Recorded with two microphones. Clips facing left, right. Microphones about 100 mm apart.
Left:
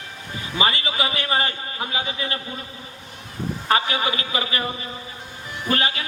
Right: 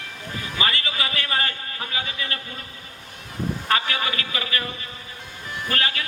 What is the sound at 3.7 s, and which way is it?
A man's voice, 20° left (ahead or behind).